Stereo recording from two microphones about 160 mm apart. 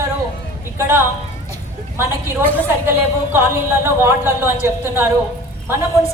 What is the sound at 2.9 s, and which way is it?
Speech, 15° right (ahead or behind).